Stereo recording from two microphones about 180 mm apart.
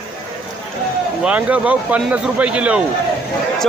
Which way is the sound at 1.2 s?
5° right (ahead or behind).